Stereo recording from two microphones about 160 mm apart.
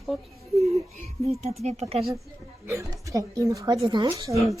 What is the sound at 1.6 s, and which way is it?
Speech, 40° right (ahead or behind).